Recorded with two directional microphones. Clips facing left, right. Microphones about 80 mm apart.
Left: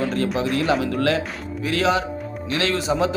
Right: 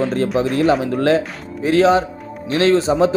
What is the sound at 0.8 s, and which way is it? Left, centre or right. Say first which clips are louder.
A man's voice: right 5 dB; right.